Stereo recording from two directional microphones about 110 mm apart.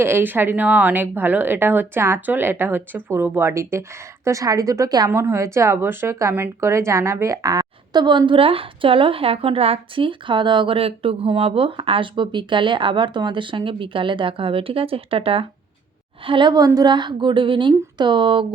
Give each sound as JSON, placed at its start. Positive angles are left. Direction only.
{"t": 0.0, "sound": "a woman's voice", "side_deg": -20}
{"t": 16.2, "sound": "speech", "side_deg": -45}